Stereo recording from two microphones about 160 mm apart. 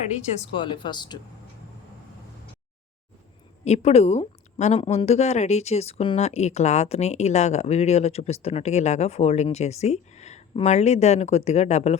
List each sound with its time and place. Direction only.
0.5 s speech: 30° left (ahead or behind)
3.6 s a woman's voice: 45° left (ahead or behind)